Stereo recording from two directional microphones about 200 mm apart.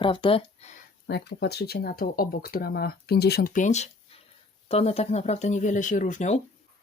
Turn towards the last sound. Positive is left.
turn(degrees=35)  # may be behind; listen again after turning